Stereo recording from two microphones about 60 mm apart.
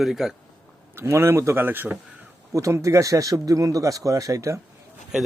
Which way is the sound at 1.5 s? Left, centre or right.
Right.